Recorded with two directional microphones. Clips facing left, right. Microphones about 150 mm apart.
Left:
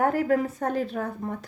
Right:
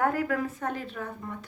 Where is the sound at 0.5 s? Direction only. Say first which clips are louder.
Left 6 dB; 40° left (ahead or behind).